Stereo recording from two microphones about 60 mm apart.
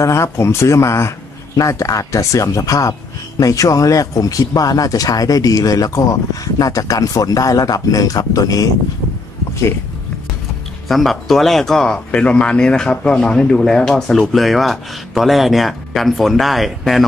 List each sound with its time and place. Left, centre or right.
0.0 s speech: left
1.6 s speech: left
10.9 s speech: centre